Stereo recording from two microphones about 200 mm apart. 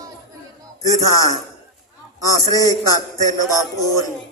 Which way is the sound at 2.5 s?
15° left (ahead or behind).